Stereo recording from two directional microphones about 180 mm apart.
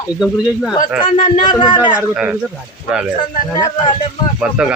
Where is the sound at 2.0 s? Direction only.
10° right (ahead or behind).